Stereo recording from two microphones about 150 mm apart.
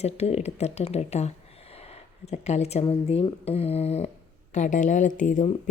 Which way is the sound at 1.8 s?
45° left (ahead or behind).